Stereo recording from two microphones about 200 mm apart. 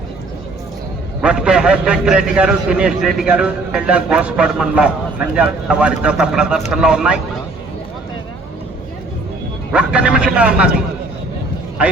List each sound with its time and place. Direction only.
1.2 s a man's voice: 5° right (ahead or behind)
9.7 s a man's voice: 5° right (ahead or behind)